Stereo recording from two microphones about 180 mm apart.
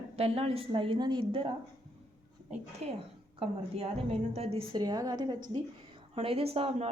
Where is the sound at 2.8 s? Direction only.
35° right (ahead or behind).